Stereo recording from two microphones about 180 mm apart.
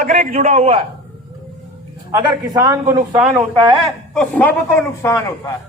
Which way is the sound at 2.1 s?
20° right (ahead or behind).